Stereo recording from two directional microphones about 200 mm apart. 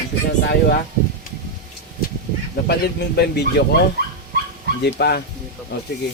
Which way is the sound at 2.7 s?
55° left (ahead or behind).